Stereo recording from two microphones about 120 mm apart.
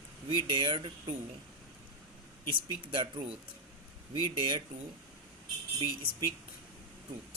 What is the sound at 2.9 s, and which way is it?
Speech, 45° right (ahead or behind).